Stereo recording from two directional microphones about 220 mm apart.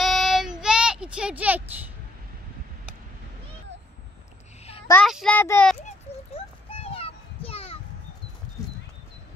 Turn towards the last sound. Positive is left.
turn(degrees=25)  # may be behind; listen again after turning